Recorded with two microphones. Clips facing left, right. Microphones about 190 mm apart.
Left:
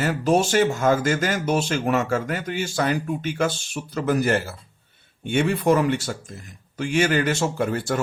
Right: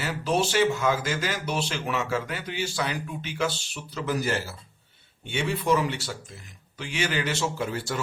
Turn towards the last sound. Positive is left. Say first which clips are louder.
# left 5 dB
turn(degrees=55)  # may be behind; listen again after turning